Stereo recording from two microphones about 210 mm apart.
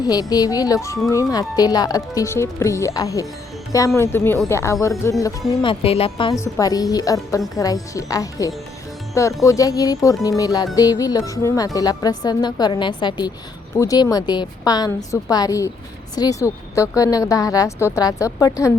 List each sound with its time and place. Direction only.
0.0 s speech: 20° left (ahead or behind)
5.5 s a woman's voice: 25° left (ahead or behind)